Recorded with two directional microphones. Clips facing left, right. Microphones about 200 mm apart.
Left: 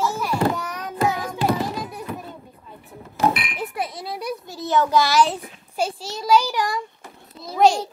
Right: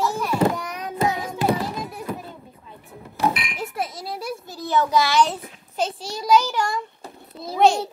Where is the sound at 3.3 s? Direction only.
55° left (ahead or behind).